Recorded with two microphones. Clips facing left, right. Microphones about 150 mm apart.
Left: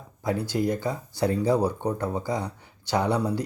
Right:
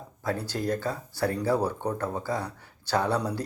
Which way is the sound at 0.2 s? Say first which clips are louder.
Left 4 dB; 15° left (ahead or behind).